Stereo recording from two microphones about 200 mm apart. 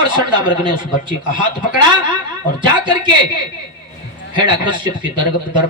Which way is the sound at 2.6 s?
20° right (ahead or behind).